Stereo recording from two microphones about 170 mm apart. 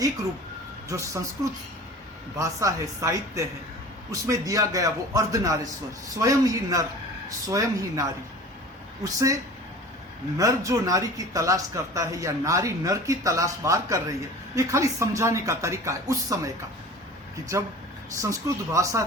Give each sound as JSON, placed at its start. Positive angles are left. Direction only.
{"t": 0.9, "sound": "speech", "side_deg": -15}
{"t": 2.4, "sound": "speech", "side_deg": -20}
{"t": 9.0, "sound": "speech", "side_deg": -20}
{"t": 10.3, "sound": "speech", "side_deg": -20}
{"t": 17.5, "sound": "speech", "side_deg": -20}